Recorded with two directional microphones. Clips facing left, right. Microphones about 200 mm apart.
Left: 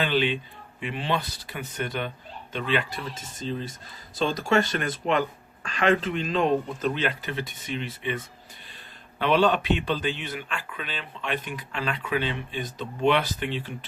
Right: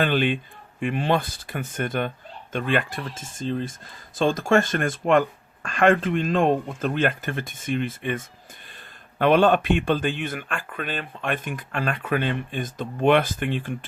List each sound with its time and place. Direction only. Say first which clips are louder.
0.0 s speech: right 3 dB; 50° right (ahead or behind)